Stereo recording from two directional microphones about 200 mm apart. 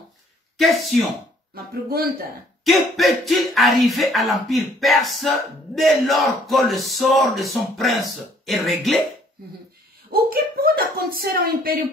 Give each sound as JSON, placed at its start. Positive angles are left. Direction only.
{"t": 0.6, "sound": "speech", "side_deg": 0}
{"t": 1.5, "sound": "speech", "side_deg": -50}
{"t": 2.6, "sound": "speech", "side_deg": 0}
{"t": 10.1, "sound": "speech", "side_deg": -50}